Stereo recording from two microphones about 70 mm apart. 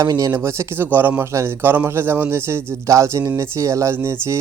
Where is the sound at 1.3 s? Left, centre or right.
Right.